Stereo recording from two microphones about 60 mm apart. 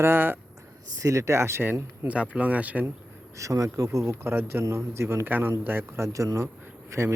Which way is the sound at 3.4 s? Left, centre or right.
Right.